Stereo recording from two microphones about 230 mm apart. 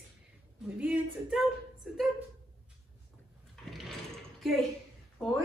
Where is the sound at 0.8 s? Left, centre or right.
Centre.